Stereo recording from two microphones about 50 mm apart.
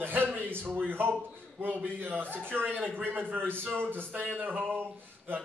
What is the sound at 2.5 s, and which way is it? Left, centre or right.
A man's voice, right.